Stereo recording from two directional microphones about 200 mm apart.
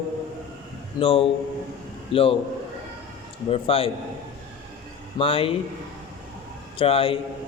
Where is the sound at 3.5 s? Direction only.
30° left (ahead or behind).